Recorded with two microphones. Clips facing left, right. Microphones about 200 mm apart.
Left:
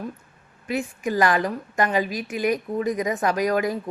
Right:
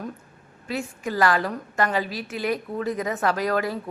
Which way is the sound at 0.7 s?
15° left (ahead or behind).